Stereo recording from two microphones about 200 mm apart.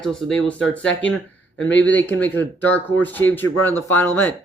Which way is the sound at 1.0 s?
5° left (ahead or behind).